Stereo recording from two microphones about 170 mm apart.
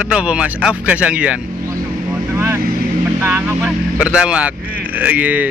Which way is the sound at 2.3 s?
15° right (ahead or behind).